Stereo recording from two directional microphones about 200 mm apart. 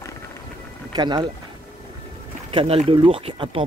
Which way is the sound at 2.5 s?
30° right (ahead or behind).